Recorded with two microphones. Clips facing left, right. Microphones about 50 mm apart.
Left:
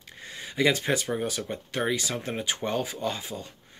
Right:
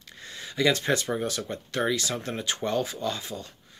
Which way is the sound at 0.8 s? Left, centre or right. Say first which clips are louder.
Right 1 dB; centre.